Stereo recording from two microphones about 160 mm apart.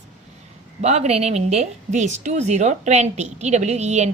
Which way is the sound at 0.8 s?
45° right (ahead or behind).